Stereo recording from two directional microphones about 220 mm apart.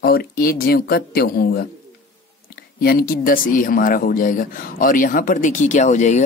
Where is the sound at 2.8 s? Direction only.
45° left (ahead or behind).